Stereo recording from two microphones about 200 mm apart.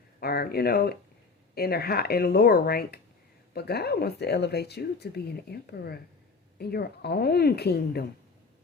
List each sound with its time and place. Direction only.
0.2 s speech: 50° left (ahead or behind)